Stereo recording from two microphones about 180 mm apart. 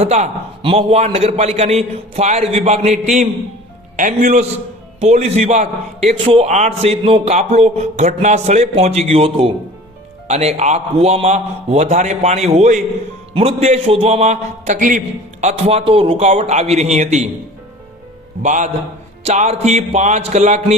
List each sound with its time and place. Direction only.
0.0 s a man's voice: 35° right (ahead or behind)
18.4 s a man's voice: 45° right (ahead or behind)